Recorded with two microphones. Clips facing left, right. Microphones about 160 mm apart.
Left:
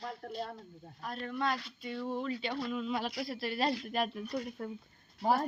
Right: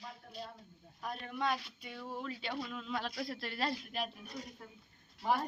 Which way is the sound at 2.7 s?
10° left (ahead or behind).